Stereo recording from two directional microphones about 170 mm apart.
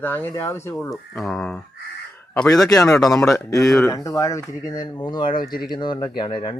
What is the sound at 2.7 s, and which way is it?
Speech, 20° left (ahead or behind).